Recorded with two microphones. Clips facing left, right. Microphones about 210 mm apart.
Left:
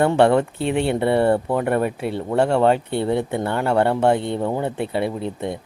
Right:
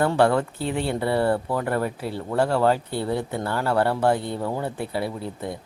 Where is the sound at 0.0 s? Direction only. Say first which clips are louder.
Left 4 dB; 25° left (ahead or behind).